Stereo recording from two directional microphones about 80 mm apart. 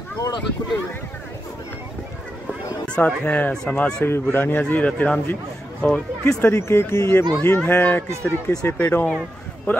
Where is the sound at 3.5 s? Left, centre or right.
Centre.